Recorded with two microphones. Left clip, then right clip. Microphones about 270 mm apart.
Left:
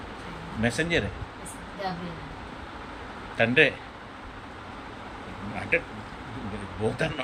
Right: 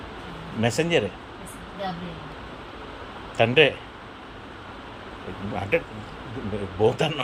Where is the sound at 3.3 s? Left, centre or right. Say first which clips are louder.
Right 3 dB; centre.